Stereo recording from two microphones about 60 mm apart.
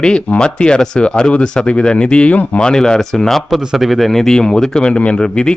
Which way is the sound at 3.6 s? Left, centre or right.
Centre.